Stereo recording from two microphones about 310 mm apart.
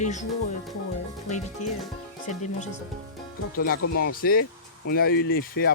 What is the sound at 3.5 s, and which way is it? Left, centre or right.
Speech, left.